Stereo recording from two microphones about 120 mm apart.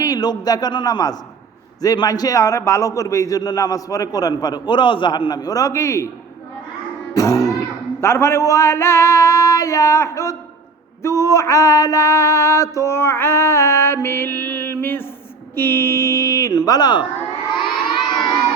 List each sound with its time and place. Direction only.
0.0 s a man's voice: 35° left (ahead or behind)
7.1 s a man's voice: 25° left (ahead or behind)
17.5 s children shouting: 40° left (ahead or behind)